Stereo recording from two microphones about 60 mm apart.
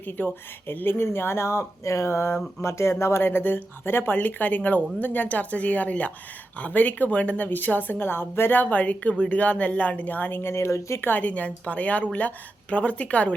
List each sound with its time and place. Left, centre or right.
0.2 s a woman's voice: left
11.0 s a woman's voice: left